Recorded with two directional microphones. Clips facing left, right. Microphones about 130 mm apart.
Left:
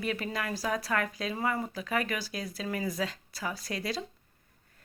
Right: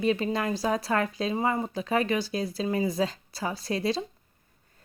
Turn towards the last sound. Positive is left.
turn(degrees=-25)  # may be behind; listen again after turning